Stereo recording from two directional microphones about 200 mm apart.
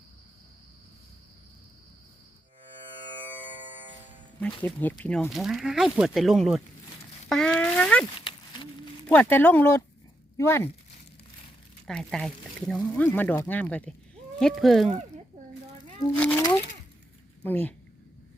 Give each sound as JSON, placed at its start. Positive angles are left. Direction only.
{"t": 4.6, "sound": "speech", "side_deg": 10}
{"t": 7.3, "sound": "a sound", "side_deg": 5}
{"t": 8.2, "sound": "a sound", "side_deg": 25}
{"t": 9.1, "sound": "speech", "side_deg": 10}
{"t": 11.9, "sound": "speech", "side_deg": 5}
{"t": 16.1, "sound": "speech", "side_deg": 10}
{"t": 17.4, "sound": "speech", "side_deg": 10}